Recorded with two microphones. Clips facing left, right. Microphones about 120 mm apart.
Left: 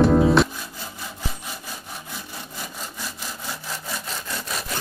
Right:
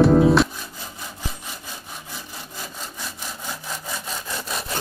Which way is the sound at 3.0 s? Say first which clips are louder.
Even; centre (ahead or behind).